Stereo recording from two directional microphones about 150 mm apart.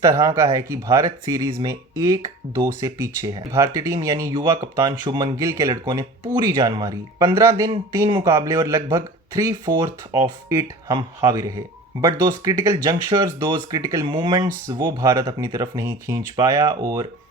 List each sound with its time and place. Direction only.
0.0 s speech: 25° right (ahead or behind)
5.5 s speech: 20° right (ahead or behind)